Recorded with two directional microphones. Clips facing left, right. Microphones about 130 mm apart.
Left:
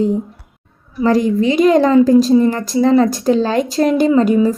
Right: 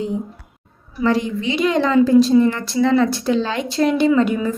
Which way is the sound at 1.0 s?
40° left (ahead or behind).